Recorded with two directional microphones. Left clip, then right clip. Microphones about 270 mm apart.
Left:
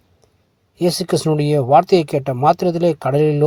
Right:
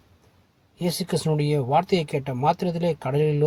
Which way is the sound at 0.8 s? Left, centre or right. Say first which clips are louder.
Left 9 dB; left.